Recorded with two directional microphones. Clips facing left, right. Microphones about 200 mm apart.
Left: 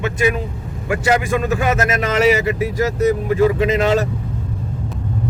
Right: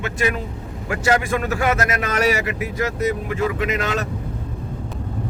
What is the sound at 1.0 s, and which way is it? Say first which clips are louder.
A man's voice: left 2 dB; 20° left (ahead or behind).